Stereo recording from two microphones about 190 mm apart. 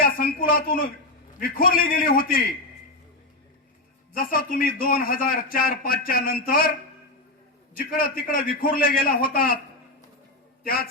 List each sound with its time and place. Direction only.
0.0 s a sound: 50° left (ahead or behind)
1.4 s a man's voice: 50° left (ahead or behind)
4.1 s a man's voice: 45° left (ahead or behind)
7.8 s a man's voice: 50° left (ahead or behind)